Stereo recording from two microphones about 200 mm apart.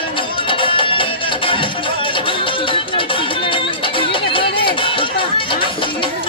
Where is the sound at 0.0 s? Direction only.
25° left (ahead or behind).